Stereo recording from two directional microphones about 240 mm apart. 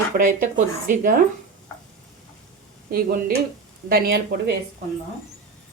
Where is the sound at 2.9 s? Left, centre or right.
Right.